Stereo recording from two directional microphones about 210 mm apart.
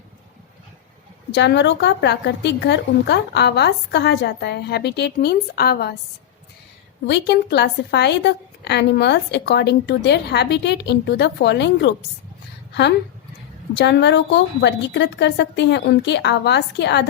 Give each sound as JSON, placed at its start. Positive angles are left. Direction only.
{"t": 1.3, "sound": "a woman's voice", "side_deg": 55}
{"t": 7.1, "sound": "a woman's voice", "side_deg": 55}
{"t": 13.7, "sound": "a woman's voice", "side_deg": 55}